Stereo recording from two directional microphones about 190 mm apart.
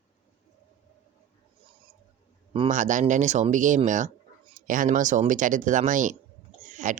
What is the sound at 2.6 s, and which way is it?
Speech, 40° right (ahead or behind).